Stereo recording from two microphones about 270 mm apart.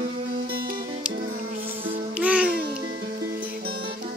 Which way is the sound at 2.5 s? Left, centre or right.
Right.